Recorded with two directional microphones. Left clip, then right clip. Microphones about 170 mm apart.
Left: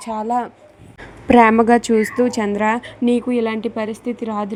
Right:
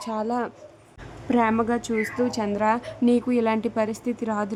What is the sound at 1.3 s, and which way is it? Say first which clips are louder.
A woman's voice: left 11 dB; 35° left (ahead or behind).